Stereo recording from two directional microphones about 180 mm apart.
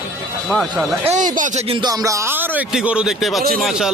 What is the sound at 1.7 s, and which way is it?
A man's voice, 20° right (ahead or behind).